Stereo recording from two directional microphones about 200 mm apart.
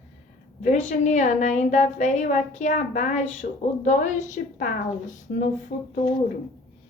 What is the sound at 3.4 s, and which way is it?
A woman's voice, 45° left (ahead or behind).